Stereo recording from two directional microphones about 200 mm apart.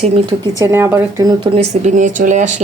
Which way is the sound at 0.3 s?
15° right (ahead or behind).